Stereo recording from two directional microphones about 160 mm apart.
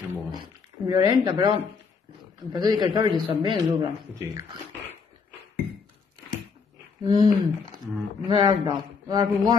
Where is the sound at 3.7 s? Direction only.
20° right (ahead or behind).